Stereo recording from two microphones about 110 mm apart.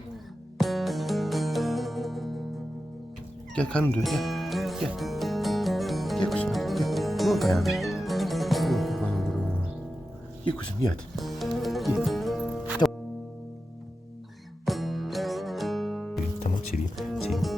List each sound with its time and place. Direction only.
0.6 s music: centre (ahead or behind)
3.5 s music: 10° left (ahead or behind)
11.2 s music: centre (ahead or behind)
12.8 s music: 40° left (ahead or behind)
14.6 s music: centre (ahead or behind)